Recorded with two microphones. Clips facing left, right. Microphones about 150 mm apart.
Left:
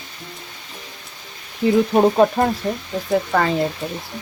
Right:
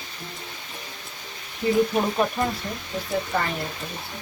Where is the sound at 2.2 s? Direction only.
90° left.